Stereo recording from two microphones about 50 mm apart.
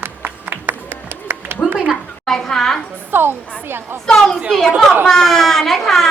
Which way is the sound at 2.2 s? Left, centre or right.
Centre.